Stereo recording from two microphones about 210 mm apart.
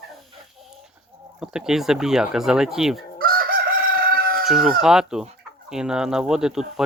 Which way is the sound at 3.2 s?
45° right (ahead or behind).